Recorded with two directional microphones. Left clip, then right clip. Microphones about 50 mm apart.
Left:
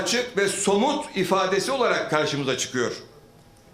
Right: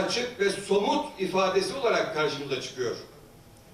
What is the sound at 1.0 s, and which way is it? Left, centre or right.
A man's voice, left.